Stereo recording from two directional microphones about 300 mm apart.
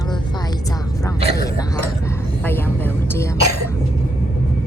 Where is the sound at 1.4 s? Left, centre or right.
Centre.